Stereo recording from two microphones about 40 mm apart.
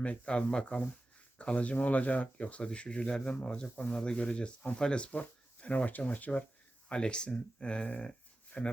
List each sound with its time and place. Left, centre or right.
0.0 s speech: left
6.8 s speech: left